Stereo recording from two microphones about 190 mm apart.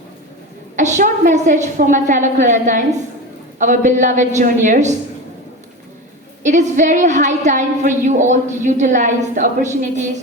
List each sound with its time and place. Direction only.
0.8 s a woman's voice: 40° right (ahead or behind)
6.4 s a woman's voice: 40° right (ahead or behind)